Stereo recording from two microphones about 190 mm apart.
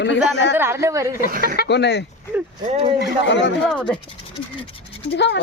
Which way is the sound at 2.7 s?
30° right (ahead or behind).